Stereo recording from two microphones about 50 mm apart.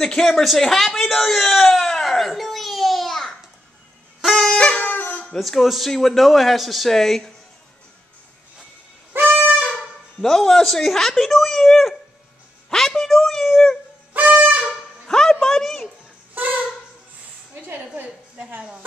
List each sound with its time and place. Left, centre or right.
0.0 s a sound: centre
4.3 s wind instrument: centre
4.6 s wind instrument: left
4.8 s music: left
5.2 s a man's voice: centre
9.3 s wind instrument: right
10.2 s a man's voice: centre
12.6 s a sound: centre
16.3 s a sound: right